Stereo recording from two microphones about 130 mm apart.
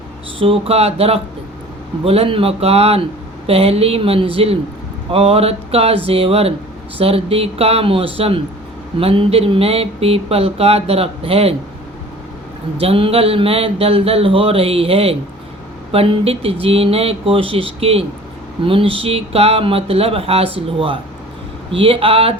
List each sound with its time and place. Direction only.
0.3 s speech: 45° right (ahead or behind)
12.7 s speech: 45° right (ahead or behind)